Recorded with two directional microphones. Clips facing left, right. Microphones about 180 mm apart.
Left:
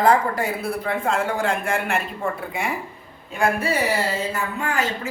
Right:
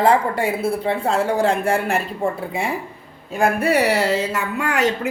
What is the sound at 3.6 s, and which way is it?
Speech, 70° right (ahead or behind).